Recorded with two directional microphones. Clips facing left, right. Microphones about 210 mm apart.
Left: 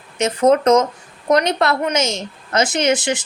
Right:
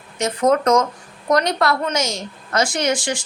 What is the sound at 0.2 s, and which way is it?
A woman's voice, 20° left (ahead or behind).